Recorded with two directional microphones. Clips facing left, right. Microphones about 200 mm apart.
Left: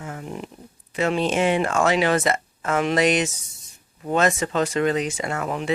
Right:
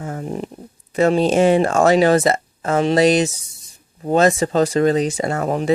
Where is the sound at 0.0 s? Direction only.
40° right (ahead or behind).